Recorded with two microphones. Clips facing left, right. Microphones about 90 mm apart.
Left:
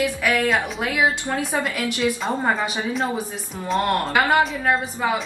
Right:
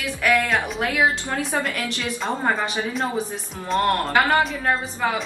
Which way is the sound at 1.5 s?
15° left (ahead or behind).